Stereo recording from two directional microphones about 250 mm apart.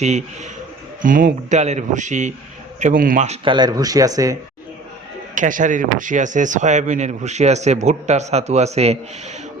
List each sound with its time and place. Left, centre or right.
0.0 s speech: right
5.3 s speech: right